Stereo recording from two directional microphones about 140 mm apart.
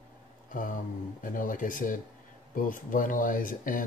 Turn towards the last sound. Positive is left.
turn(degrees=75)  # may be behind; listen again after turning